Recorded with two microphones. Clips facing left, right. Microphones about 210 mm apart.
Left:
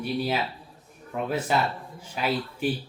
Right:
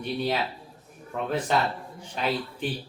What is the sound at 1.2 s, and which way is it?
Speech, 5° left (ahead or behind).